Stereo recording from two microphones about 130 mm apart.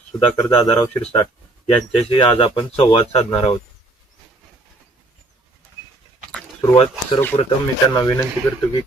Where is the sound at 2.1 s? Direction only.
40° left (ahead or behind).